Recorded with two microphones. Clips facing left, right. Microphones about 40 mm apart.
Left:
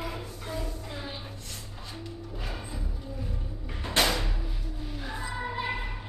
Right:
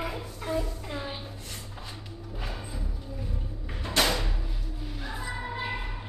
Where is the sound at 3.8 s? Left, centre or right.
Centre.